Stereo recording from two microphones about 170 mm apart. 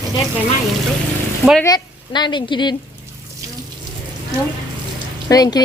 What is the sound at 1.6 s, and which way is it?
A woman's voice, 25° left (ahead or behind).